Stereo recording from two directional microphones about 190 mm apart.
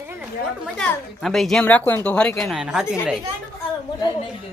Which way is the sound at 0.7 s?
Centre (ahead or behind).